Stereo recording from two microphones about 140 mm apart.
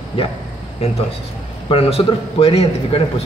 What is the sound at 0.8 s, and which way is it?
A man's voice, 45° left (ahead or behind).